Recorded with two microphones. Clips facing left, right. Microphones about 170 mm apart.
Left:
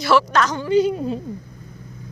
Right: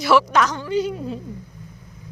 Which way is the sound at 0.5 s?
20° left (ahead or behind).